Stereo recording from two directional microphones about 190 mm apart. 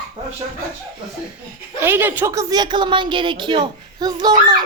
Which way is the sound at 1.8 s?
10° right (ahead or behind).